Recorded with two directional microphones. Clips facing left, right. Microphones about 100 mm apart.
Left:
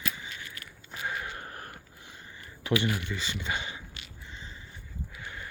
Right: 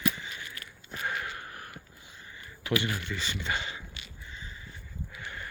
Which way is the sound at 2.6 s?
20° left (ahead or behind).